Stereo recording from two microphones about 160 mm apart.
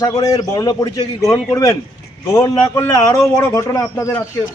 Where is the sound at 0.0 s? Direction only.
25° left (ahead or behind).